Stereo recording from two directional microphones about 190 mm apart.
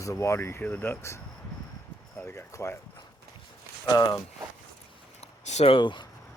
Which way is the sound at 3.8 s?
20° left (ahead or behind).